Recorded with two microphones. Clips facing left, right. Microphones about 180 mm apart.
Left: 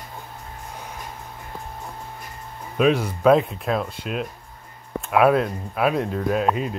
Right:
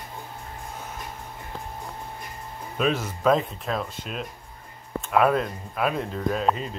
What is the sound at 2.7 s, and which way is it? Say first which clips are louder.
Speech: left 6 dB; 10° left (ahead or behind).